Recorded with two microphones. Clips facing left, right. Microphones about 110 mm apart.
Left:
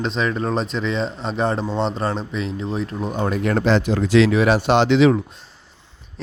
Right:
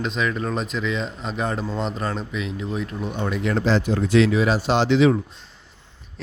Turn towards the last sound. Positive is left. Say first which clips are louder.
# left 3 dB
turn(degrees=80)